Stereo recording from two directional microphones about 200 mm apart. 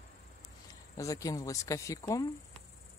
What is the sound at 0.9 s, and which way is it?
Speech, 15° left (ahead or behind).